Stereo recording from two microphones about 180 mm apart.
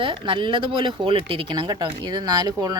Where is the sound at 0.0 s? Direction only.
25° right (ahead or behind).